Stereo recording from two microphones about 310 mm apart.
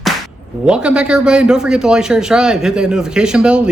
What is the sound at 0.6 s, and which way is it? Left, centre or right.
A man's voice, centre.